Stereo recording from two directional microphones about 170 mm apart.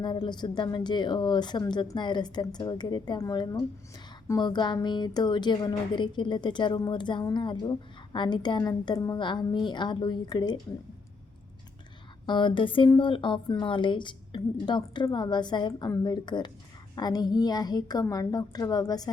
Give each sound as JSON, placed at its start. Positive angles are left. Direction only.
{"t": 0.0, "sound": "a woman's voice", "side_deg": 25}
{"t": 12.2, "sound": "a woman's voice", "side_deg": 25}